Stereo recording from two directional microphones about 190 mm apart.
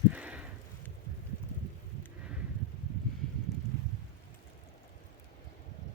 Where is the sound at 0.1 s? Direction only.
5° right (ahead or behind).